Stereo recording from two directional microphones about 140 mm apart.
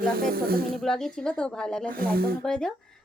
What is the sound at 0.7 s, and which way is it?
A woman's voice, 5° left (ahead or behind).